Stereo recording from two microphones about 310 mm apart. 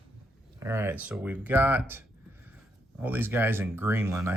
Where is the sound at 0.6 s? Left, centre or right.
Centre.